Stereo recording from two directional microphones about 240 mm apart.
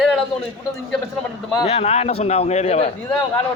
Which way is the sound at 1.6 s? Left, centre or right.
Left.